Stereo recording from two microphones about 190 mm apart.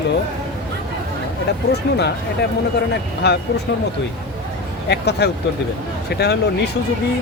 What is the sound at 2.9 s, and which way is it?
Speech, 60° left (ahead or behind).